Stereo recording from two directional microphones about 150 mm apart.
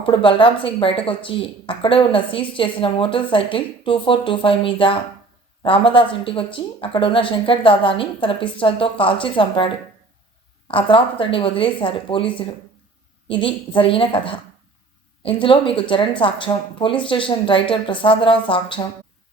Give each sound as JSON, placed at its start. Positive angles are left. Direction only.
{"t": 0.0, "sound": "speech", "side_deg": 35}
{"t": 10.7, "sound": "speech", "side_deg": 35}